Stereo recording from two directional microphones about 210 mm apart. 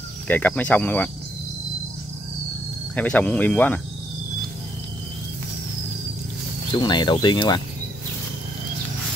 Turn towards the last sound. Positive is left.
turn(degrees=20)  # may be behind; listen again after turning